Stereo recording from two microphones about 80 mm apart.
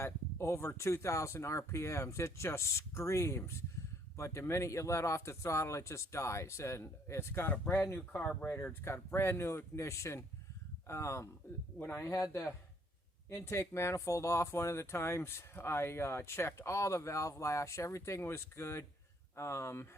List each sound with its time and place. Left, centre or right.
0.0 s speech: left
11.8 s speech: left
12.1 s speech: left